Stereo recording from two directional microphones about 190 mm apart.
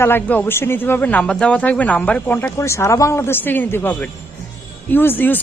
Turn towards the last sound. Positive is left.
turn(degrees=10)  # may be behind; listen again after turning